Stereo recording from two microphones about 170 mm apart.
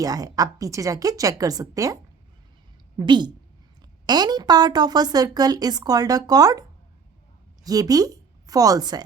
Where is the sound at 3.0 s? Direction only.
25° right (ahead or behind).